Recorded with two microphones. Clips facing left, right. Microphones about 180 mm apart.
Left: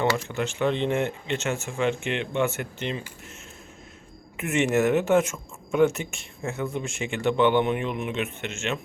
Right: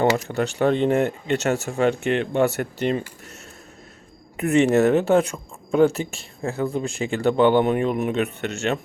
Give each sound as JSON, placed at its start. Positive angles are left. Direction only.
{"t": 0.0, "sound": "speech", "side_deg": -40}
{"t": 4.4, "sound": "speech", "side_deg": -35}